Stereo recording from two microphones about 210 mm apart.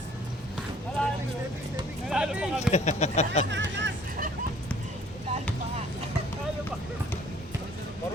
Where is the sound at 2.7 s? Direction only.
35° left (ahead or behind).